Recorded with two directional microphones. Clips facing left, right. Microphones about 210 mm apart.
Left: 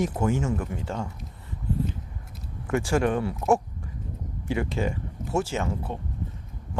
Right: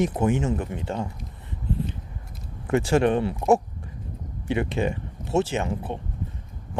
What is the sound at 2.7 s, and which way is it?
Speech, 20° right (ahead or behind).